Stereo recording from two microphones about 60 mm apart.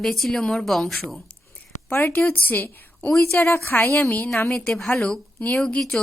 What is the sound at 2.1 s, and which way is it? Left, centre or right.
A woman's voice, left.